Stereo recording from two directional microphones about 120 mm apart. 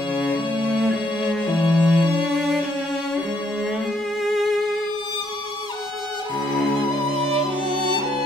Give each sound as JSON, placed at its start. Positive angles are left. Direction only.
{"t": 0.1, "sound": "music", "side_deg": -5}
{"t": 4.2, "sound": "music", "side_deg": 0}
{"t": 7.2, "sound": "music", "side_deg": -55}